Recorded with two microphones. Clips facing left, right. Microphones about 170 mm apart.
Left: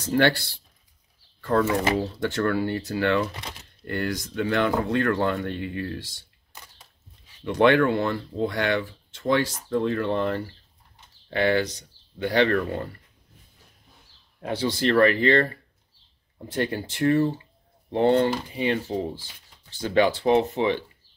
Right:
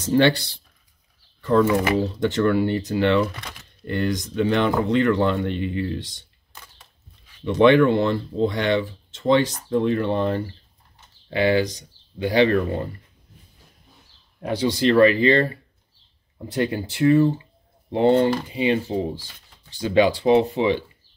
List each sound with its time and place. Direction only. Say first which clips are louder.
0.0 s speech: right 4 dB; 20° right (ahead or behind)
3.3 s speech: right 2 dB; 25° left (ahead or behind)
3.8 s speech: right 4 dB; 20° right (ahead or behind)
7.4 s speech: right 4 dB; 20° right (ahead or behind)
14.4 s speech: right 4 dB; 15° right (ahead or behind)